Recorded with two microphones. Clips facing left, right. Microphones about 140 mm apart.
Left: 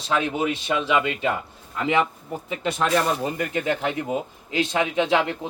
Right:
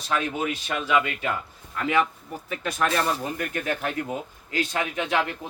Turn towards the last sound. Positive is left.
turn(degrees=25)  # may be behind; listen again after turning